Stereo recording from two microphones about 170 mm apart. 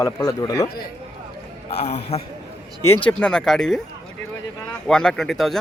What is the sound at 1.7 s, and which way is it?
Speech, 40° left (ahead or behind).